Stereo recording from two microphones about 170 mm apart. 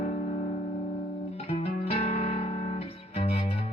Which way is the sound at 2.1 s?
40° left (ahead or behind).